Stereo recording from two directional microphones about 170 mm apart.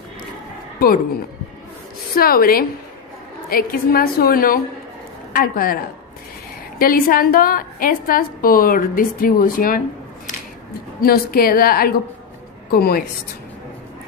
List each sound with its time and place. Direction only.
0.8 s a woman's voice: 60° left (ahead or behind)
11.0 s a woman's voice: 60° left (ahead or behind)